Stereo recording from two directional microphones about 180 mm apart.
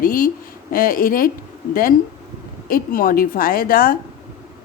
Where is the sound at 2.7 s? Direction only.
50° left (ahead or behind).